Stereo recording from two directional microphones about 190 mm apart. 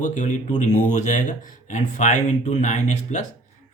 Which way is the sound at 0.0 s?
40° left (ahead or behind).